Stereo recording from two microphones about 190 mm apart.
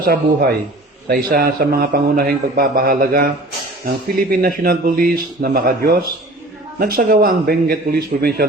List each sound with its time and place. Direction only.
0.0 s a man's voice: 55° right (ahead or behind)